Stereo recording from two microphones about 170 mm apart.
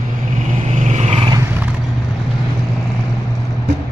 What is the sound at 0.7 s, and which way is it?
Vehicle, 45° right (ahead or behind).